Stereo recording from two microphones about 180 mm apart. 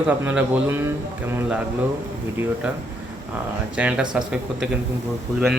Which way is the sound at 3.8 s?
5° right (ahead or behind).